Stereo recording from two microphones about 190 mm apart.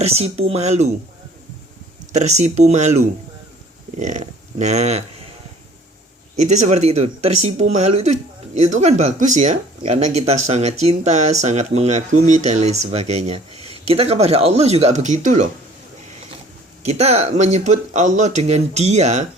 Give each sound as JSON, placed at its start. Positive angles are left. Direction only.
{"t": 0.0, "sound": "speech", "side_deg": -35}
{"t": 2.1, "sound": "speech", "side_deg": -35}
{"t": 6.4, "sound": "speech", "side_deg": -35}
{"t": 16.8, "sound": "speech", "side_deg": -35}